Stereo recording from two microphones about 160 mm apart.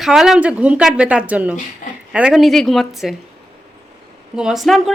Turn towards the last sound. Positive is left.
turn(degrees=0)  # may be behind; listen again after turning